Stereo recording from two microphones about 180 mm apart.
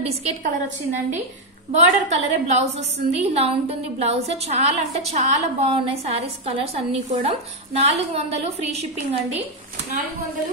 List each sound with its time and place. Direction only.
0.0 s a woman's voice: 35° right (ahead or behind)
1.7 s a woman's voice: 40° right (ahead or behind)